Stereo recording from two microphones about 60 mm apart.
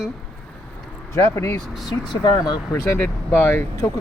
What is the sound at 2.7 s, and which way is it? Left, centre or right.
Speech, left.